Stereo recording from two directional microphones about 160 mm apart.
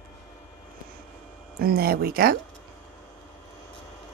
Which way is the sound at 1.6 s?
70° right (ahead or behind).